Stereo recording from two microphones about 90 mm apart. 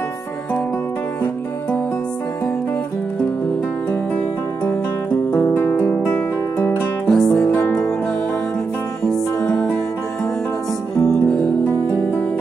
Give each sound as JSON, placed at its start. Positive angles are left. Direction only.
{"t": 5.3, "sound": "music", "side_deg": 25}
{"t": 7.1, "sound": "music", "side_deg": 5}
{"t": 11.0, "sound": "music", "side_deg": 10}
{"t": 11.6, "sound": "music", "side_deg": 20}